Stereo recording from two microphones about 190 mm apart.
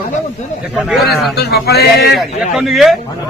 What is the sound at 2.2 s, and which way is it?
Speech, centre (ahead or behind).